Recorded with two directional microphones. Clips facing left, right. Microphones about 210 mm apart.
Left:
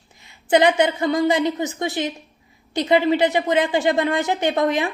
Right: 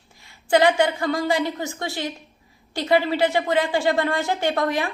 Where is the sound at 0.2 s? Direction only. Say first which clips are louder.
Left 2 dB; 20° left (ahead or behind).